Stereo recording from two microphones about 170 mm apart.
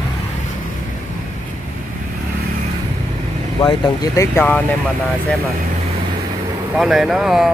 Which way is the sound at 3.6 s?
25° left (ahead or behind).